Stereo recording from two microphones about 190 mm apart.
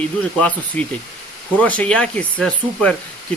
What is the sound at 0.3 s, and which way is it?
Speech, 5° left (ahead or behind).